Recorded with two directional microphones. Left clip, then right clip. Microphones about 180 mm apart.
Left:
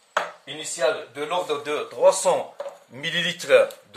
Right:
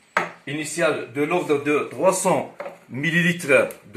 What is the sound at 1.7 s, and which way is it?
Speech, 35° left (ahead or behind).